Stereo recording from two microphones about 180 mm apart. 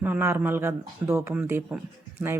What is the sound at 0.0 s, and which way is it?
Speech, 10° right (ahead or behind).